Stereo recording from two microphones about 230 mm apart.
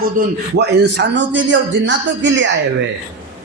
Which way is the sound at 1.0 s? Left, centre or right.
Right.